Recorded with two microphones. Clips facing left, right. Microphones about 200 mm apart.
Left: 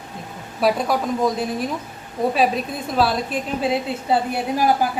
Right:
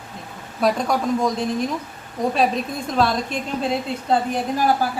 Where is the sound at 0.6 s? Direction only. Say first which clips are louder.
Even; 5° left (ahead or behind).